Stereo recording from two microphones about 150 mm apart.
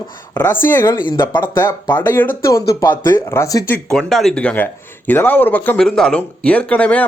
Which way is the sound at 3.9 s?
Centre (ahead or behind).